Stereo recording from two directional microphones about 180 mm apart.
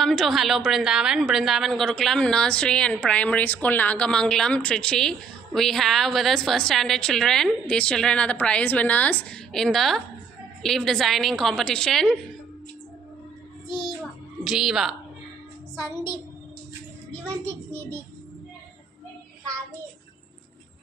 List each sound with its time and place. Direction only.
0.0 s a woman's voice: centre (ahead or behind)
14.4 s a woman's voice: 5° right (ahead or behind)
17.5 s a child's voice: 10° left (ahead or behind)